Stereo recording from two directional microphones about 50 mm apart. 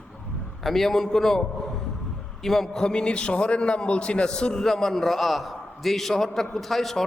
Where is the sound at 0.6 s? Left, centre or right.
Centre.